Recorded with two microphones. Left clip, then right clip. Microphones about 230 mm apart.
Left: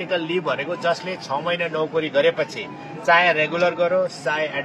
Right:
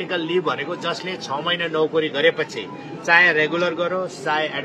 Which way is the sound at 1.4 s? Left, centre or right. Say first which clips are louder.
Right 4 dB; right.